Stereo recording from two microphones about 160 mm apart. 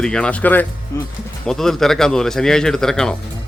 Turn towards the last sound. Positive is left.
turn(degrees=5)  # may be behind; listen again after turning